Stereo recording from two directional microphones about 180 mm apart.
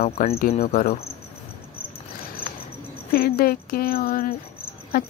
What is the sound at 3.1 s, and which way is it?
A woman's voice, 55° left (ahead or behind).